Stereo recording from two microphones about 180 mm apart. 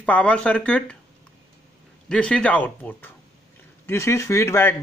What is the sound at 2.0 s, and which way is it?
Speech, 5° left (ahead or behind).